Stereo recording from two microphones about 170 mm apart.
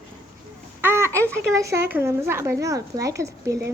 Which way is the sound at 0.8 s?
15° right (ahead or behind).